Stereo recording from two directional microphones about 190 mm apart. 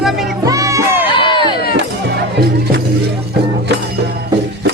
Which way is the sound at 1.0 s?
25° left (ahead or behind).